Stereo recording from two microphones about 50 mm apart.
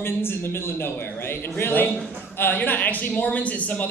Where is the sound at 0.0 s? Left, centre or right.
Left.